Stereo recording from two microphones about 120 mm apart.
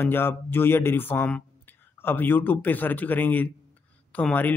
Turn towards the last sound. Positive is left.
turn(degrees=15)  # may be behind; listen again after turning